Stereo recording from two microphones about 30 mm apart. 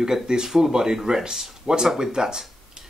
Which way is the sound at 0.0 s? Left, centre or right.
Centre.